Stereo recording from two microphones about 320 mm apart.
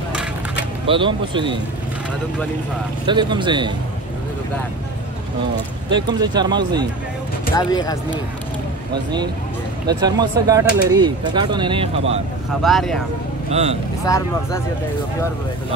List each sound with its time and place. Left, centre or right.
0.8 s speech: centre
3.1 s speech: centre
5.9 s speech: centre
7.5 s speech: centre
9.8 s speech: centre
12.6 s speech: centre
13.5 s speech: centre
14.0 s speech: centre